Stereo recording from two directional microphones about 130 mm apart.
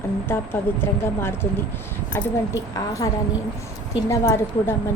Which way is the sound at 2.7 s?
25° left (ahead or behind).